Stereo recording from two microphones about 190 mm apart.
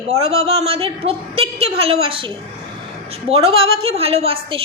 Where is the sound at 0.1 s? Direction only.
35° right (ahead or behind).